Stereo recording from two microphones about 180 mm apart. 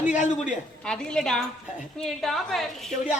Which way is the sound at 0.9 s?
5° left (ahead or behind).